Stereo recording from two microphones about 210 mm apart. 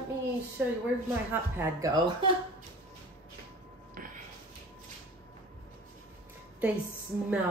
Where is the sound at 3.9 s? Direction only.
40° right (ahead or behind).